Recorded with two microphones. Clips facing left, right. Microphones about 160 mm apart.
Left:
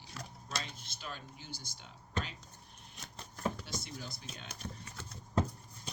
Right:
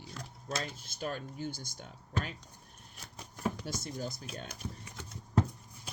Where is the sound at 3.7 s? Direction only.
45° right (ahead or behind).